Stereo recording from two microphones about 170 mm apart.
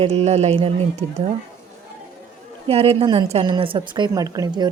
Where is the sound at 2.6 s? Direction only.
35° right (ahead or behind).